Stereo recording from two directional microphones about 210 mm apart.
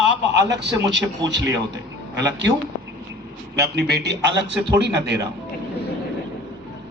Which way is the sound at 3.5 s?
50° right (ahead or behind).